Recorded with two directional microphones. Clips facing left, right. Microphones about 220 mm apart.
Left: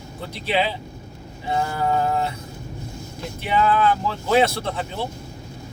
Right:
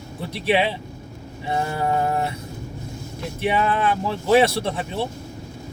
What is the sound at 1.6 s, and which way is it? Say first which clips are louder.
Mantra: even; 25° right (ahead or behind).